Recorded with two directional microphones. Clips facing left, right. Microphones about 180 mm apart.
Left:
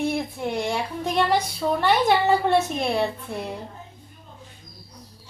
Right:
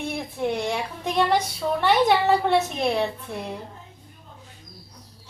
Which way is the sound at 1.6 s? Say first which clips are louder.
Left 3 dB; 20° left (ahead or behind).